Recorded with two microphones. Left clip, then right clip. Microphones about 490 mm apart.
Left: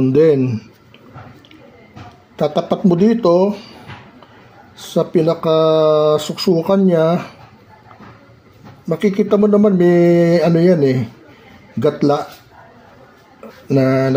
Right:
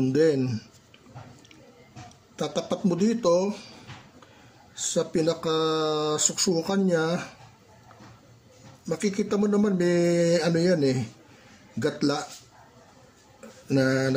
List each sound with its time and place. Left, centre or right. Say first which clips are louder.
0.0 s speech: left 10 dB; right
2.3 s speech: left 12 dB; right
4.7 s speech: left 10 dB; right
8.8 s speech: left 11 dB; right
13.7 s speech: left 9 dB; right